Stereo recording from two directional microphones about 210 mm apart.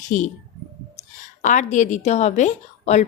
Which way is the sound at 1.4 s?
35° left (ahead or behind).